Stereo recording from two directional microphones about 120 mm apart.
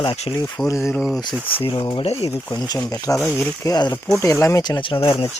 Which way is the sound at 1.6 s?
45° left (ahead or behind).